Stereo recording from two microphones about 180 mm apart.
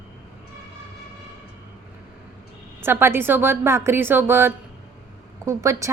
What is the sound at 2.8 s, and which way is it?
A woman's voice, 15° right (ahead or behind).